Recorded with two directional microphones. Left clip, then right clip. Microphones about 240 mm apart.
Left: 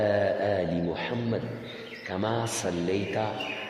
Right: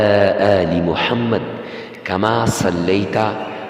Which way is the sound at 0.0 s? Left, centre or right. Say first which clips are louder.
Right 12 dB; right.